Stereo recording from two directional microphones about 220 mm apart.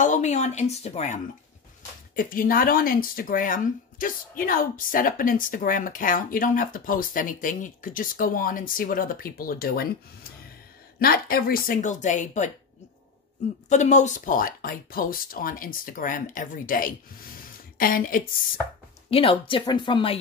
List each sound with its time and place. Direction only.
0.0 s speech: 35° left (ahead or behind)
11.0 s speech: 40° left (ahead or behind)
13.7 s speech: 35° left (ahead or behind)
19.0 s speech: 25° left (ahead or behind)